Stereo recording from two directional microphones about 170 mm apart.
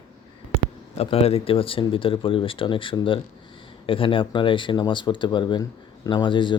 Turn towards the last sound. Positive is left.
turn(degrees=30)  # may be behind; listen again after turning